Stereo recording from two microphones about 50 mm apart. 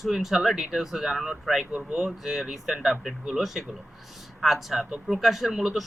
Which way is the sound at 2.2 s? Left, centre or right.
Centre.